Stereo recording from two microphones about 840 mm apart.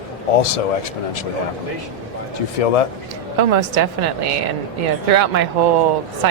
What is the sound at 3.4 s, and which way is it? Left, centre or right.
Speech, right.